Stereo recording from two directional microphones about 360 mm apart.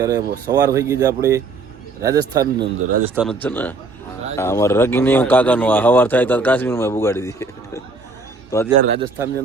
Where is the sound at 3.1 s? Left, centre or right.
Centre.